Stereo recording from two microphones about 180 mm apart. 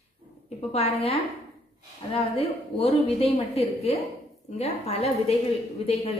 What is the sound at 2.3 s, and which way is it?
A woman's voice, 35° left (ahead or behind).